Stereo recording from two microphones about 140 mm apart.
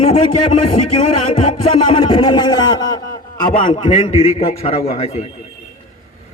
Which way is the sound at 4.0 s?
45° left (ahead or behind).